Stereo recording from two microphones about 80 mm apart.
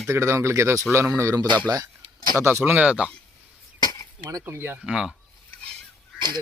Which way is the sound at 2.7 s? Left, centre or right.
Centre.